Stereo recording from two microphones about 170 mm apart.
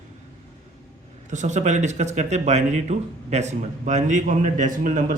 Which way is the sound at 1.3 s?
45° right (ahead or behind).